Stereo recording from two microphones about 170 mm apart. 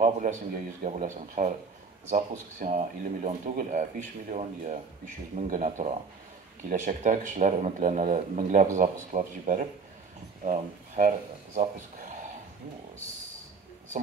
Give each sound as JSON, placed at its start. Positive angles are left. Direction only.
{"t": 0.0, "sound": "speech", "side_deg": -50}
{"t": 2.6, "sound": "speech", "side_deg": -45}